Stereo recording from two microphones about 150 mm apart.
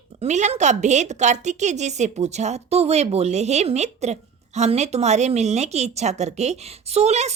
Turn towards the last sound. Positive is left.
turn(degrees=-45)  # may be behind; listen again after turning